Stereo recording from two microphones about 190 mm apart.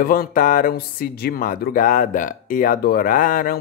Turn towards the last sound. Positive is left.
turn(degrees=45)  # may be behind; listen again after turning